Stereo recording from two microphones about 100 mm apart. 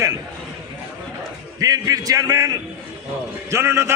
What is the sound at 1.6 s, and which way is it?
A man's voice, 35° right (ahead or behind).